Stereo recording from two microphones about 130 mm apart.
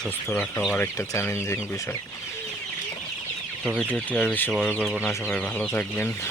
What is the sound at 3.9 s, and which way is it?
Speech, 10° left (ahead or behind).